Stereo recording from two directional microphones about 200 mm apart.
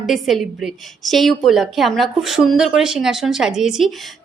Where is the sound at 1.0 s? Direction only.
Centre (ahead or behind).